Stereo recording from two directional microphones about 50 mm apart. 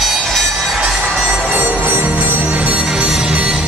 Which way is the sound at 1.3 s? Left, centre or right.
Right.